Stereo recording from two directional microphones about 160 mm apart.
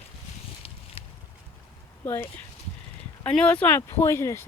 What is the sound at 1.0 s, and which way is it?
Boat, 35° left (ahead or behind).